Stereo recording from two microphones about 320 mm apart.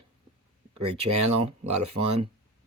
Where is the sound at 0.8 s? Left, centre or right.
Centre.